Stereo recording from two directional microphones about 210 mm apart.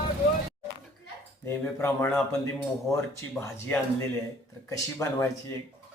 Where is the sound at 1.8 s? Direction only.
10° left (ahead or behind).